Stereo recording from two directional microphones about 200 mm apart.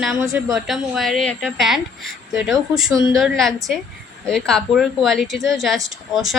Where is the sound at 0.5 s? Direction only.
Centre (ahead or behind).